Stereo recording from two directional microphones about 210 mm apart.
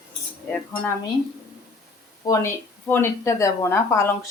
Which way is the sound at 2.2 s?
15° left (ahead or behind).